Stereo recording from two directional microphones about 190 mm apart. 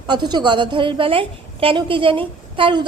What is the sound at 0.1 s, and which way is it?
A woman's voice, 25° right (ahead or behind).